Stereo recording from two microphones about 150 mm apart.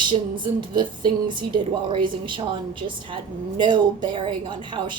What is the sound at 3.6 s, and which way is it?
A woman's voice, 30° right (ahead or behind).